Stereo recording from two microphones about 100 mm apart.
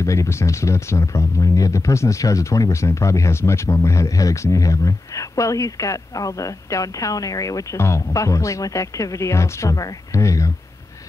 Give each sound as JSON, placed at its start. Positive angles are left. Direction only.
{"t": 0.0, "sound": "speech", "side_deg": 30}